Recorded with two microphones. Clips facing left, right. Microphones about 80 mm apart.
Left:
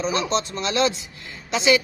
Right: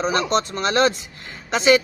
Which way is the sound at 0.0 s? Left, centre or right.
Right.